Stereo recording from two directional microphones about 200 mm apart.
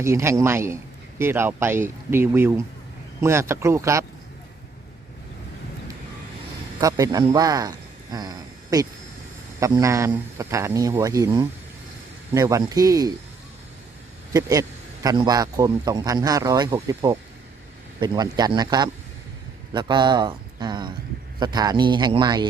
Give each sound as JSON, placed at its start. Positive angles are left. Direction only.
{"t": 0.0, "sound": "speech", "side_deg": -15}
{"t": 6.7, "sound": "speech", "side_deg": -15}
{"t": 14.3, "sound": "a man's voice", "side_deg": -15}